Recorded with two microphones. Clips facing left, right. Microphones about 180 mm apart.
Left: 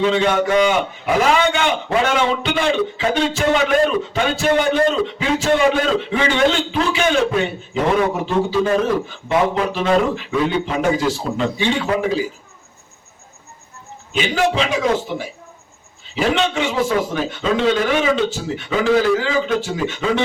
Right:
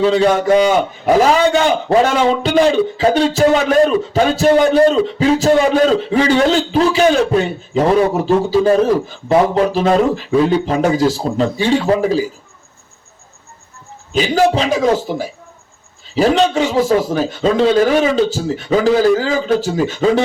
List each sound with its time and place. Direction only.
0.0 s a man's voice: 35° right (ahead or behind)
14.1 s a man's voice: 35° right (ahead or behind)